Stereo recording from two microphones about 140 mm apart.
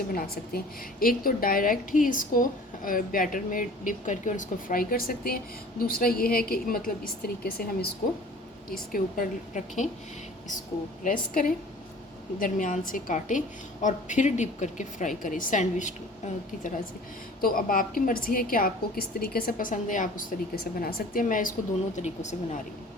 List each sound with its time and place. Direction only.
0.1 s a woman's voice: 90° left
8.9 s a woman's voice: 75° left (ahead or behind)
11.0 s a woman's voice: 80° left
12.4 s a woman's voice: 65° left (ahead or behind)
17.4 s a woman's voice: 90° left; by 21.5 s 75° left (ahead or behind)
21.9 s a woman's voice: 55° left (ahead or behind)